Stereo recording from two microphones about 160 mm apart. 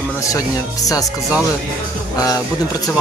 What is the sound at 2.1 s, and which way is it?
Speech, 20° left (ahead or behind).